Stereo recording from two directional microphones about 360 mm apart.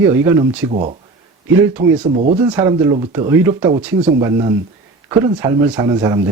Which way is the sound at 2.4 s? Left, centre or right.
Centre.